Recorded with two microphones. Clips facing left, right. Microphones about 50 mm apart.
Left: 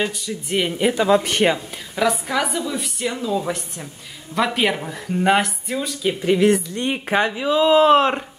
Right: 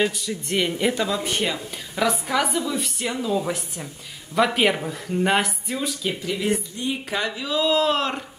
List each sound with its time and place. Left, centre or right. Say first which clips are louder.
0.0 s speech: right 1 dB; centre
1.2 s speech: left 6 dB; left
2.0 s a woman's voice: left 2 dB; centre
6.4 s speech: left 4 dB; left
7.1 s speech: left 7 dB; left